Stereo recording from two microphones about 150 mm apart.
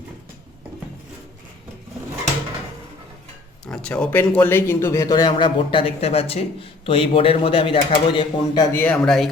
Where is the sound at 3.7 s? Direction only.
5° left (ahead or behind); by 8.7 s 35° left (ahead or behind).